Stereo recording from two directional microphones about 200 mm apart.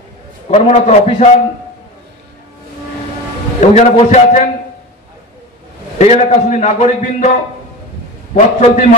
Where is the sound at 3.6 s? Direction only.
35° left (ahead or behind).